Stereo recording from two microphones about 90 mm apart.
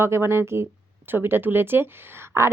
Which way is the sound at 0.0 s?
30° right (ahead or behind).